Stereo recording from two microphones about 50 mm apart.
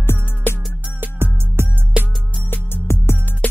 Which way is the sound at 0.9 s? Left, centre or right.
Right.